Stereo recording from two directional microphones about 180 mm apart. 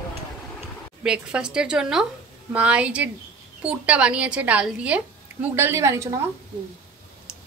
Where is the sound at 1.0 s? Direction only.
5° right (ahead or behind).